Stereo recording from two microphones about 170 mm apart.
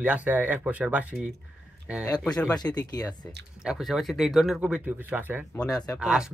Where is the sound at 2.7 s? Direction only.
20° left (ahead or behind).